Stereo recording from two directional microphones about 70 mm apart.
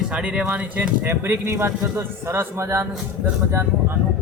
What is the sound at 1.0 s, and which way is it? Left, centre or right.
A man's voice, right.